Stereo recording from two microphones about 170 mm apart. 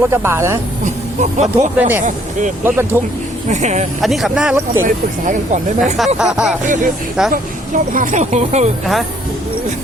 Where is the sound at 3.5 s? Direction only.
45° right (ahead or behind).